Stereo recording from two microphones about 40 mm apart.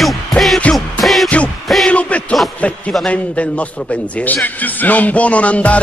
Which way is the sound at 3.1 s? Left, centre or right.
Left.